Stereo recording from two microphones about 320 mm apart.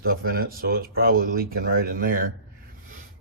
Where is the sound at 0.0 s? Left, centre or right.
Right.